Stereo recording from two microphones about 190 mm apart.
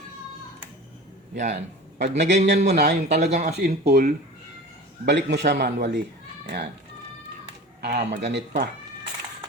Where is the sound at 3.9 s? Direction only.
55° right (ahead or behind).